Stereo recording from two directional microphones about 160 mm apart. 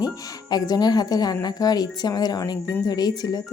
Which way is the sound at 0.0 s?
25° left (ahead or behind).